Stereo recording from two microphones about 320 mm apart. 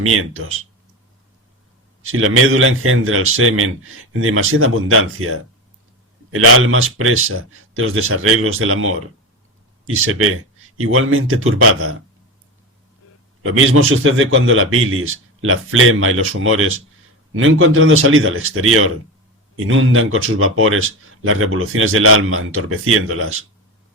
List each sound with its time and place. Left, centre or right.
0.0 s a man's voice: right
2.0 s a man's voice: right
13.9 s a man's voice: right